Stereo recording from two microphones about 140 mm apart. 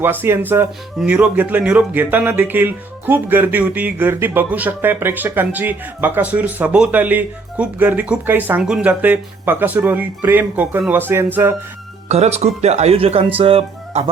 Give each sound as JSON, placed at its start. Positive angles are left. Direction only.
{"t": 0.0, "sound": "speech", "side_deg": -15}
{"t": 0.9, "sound": "speech", "side_deg": -5}
{"t": 12.0, "sound": "speech", "side_deg": -50}